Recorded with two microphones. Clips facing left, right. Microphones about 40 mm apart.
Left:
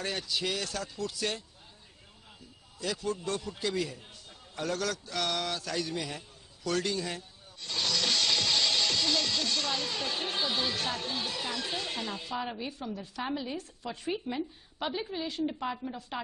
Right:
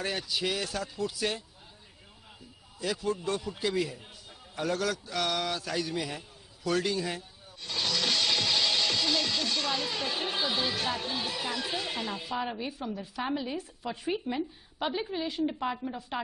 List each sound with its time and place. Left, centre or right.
0.0 s a man's voice: centre
2.8 s a man's voice: centre